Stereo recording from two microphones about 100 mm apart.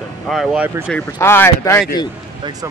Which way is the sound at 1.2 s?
25° left (ahead or behind).